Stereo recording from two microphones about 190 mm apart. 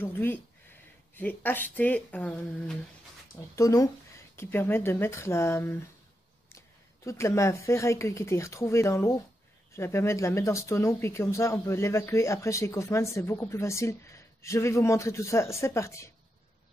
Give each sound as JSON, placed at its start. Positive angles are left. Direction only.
{"t": 0.0, "sound": "speech", "side_deg": 10}
{"t": 7.1, "sound": "speech", "side_deg": 15}